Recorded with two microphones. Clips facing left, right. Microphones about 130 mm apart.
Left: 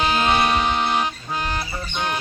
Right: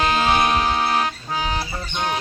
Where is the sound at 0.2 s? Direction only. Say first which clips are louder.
Right 1 dB; centre (ahead or behind).